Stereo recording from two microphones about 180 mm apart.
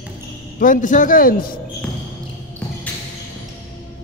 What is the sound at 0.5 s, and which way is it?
Speech, 45° left (ahead or behind).